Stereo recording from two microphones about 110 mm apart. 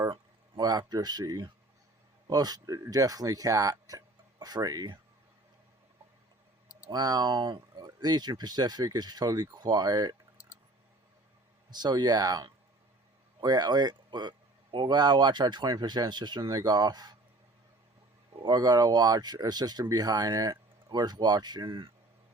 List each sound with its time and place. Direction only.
0.6 s speech: 35° right (ahead or behind)
6.9 s speech: 35° right (ahead or behind)
11.7 s speech: 40° right (ahead or behind)
18.4 s speech: 40° right (ahead or behind)